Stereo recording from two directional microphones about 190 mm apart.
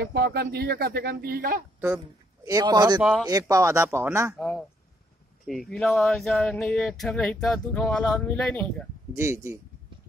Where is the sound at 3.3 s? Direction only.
20° right (ahead or behind).